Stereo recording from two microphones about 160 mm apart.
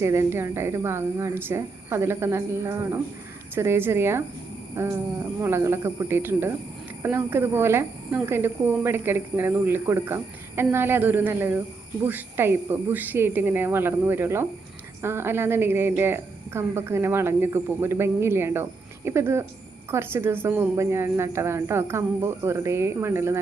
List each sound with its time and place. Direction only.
0.0 s speech: 15° right (ahead or behind)